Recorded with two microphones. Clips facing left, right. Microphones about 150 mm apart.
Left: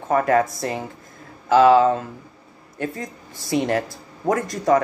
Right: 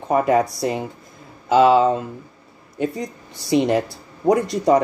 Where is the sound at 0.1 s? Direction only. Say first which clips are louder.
Right 1 dB; 15° right (ahead or behind).